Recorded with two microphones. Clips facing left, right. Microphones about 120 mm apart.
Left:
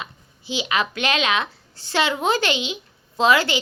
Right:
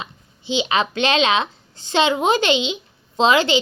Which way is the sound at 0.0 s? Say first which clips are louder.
Right 2 dB; 25° right (ahead or behind).